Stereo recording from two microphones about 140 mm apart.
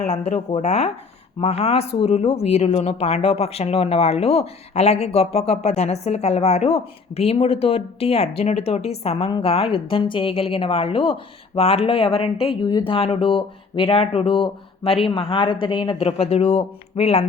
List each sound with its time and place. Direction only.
0.1 s speech: 50° left (ahead or behind)